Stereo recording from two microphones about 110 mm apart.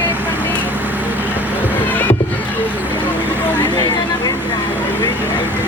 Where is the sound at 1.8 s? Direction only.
15° left (ahead or behind).